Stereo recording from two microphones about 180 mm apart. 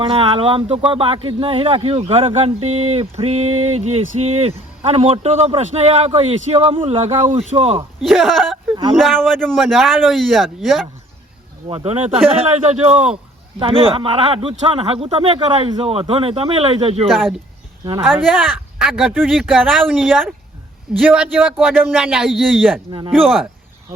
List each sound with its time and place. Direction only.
0.0 s a man's voice: 30° right (ahead or behind)
8.0 s speech: centre (ahead or behind)
11.7 s a man's voice: 35° right (ahead or behind)
17.1 s a man's voice: centre (ahead or behind)
22.9 s speech: 25° right (ahead or behind)
23.2 s speech: centre (ahead or behind)